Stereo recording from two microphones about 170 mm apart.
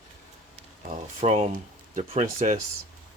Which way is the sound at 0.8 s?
45° right (ahead or behind).